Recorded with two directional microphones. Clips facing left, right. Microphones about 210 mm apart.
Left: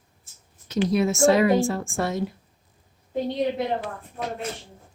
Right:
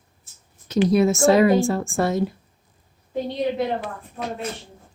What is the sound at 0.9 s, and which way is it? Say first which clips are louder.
A woman's voice: right 2 dB; 40° right (ahead or behind).